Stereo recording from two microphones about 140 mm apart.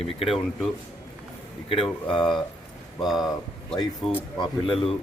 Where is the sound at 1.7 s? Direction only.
40° left (ahead or behind).